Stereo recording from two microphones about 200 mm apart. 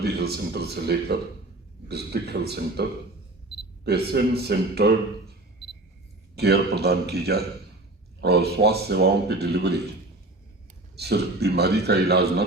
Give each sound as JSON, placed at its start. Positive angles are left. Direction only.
{"t": 0.0, "sound": "a man's voice", "side_deg": -55}
{"t": 3.8, "sound": "a man's voice", "side_deg": -55}
{"t": 6.3, "sound": "speech", "side_deg": -55}
{"t": 10.9, "sound": "speech", "side_deg": -55}